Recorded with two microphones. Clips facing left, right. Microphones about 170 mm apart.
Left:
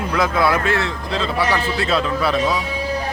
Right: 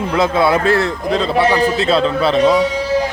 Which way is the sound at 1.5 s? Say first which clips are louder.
Right 6 dB; 25° right (ahead or behind).